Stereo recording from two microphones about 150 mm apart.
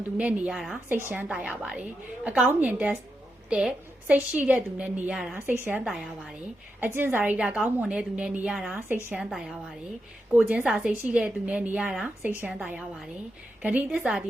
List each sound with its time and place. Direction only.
0.2 s a woman's voice: 10° right (ahead or behind)